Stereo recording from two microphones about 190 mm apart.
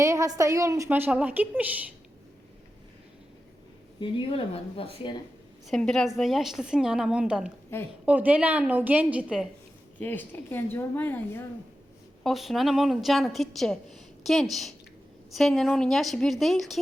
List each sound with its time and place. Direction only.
0.0 s a woman's voice: 15° right (ahead or behind)
4.0 s speech: 30° left (ahead or behind)
5.6 s a woman's voice: 5° left (ahead or behind)
10.0 s speech: 10° left (ahead or behind)
12.2 s a woman's voice: centre (ahead or behind)